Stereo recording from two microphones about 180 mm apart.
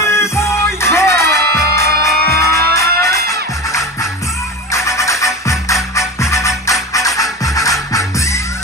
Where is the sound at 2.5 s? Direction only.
15° left (ahead or behind).